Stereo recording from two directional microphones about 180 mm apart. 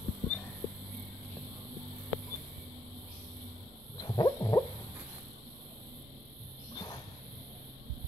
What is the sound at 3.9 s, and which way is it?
Dog, 20° left (ahead or behind).